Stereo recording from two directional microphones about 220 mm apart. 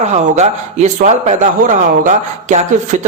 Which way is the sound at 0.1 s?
30° right (ahead or behind).